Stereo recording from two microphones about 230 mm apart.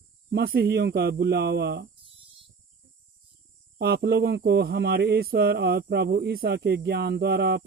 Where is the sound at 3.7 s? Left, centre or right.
Right.